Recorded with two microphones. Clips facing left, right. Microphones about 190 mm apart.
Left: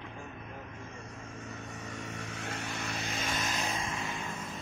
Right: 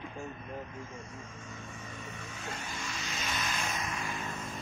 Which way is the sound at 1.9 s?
80° left.